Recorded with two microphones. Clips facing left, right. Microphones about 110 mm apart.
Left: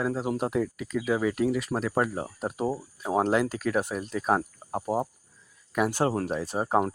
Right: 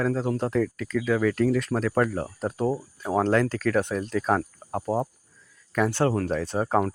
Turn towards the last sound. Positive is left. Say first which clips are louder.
# right 1 dB
turn(degrees=15)  # may be behind; listen again after turning